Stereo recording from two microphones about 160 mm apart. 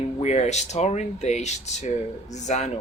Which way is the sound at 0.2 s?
45° left (ahead or behind).